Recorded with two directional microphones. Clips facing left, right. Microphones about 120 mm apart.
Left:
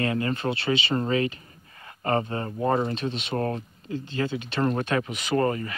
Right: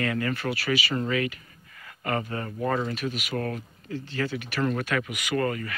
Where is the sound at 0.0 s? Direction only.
25° left (ahead or behind).